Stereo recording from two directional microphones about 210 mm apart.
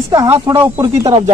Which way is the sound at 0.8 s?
20° right (ahead or behind).